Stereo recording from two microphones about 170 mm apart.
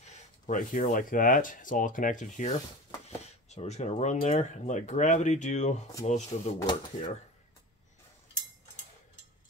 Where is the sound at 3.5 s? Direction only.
40° left (ahead or behind).